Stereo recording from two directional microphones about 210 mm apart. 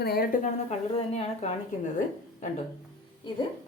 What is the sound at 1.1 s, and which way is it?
Speech, 30° left (ahead or behind).